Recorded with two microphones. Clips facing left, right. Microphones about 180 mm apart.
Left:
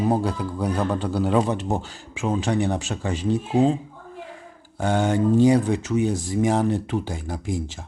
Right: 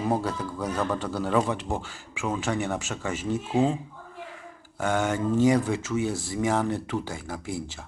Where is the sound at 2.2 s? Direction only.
35° left (ahead or behind).